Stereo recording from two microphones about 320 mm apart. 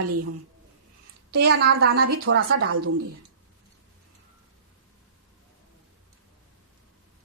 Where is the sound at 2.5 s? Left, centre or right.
Right.